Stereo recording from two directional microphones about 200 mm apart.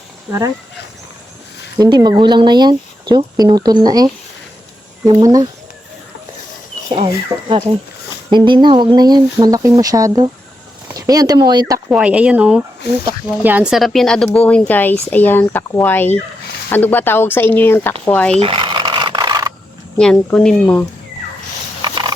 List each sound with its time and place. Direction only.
1.8 s speech: 20° right (ahead or behind)
6.9 s speech: 25° right (ahead or behind)
11.9 s speech: 5° right (ahead or behind)
18.3 s a sound: 25° right (ahead or behind)
20.0 s speech: 5° left (ahead or behind)